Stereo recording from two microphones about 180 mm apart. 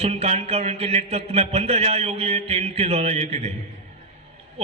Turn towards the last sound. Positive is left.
turn(degrees=-35)  # may be behind; listen again after turning